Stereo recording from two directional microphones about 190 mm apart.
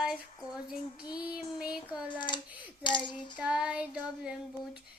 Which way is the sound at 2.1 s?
25° left (ahead or behind).